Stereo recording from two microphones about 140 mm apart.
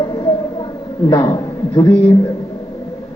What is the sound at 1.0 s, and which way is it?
Speech, 35° left (ahead or behind).